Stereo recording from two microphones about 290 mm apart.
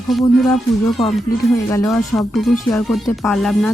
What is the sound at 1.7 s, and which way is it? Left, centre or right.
Speech, centre.